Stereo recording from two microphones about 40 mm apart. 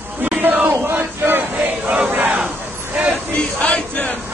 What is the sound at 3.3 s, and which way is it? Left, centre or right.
Choir, left.